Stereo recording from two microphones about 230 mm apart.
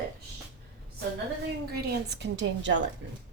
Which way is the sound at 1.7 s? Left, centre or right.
Right.